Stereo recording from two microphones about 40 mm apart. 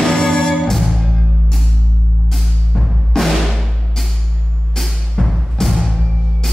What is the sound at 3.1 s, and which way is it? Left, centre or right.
Music, centre.